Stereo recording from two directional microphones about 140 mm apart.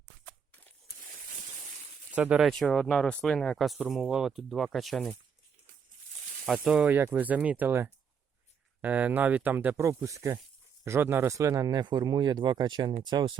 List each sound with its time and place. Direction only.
2.1 s speech: 10° right (ahead or behind)
2.5 s speech: 5° left (ahead or behind)
6.4 s speech: 5° right (ahead or behind); by 13.3 s 30° right (ahead or behind)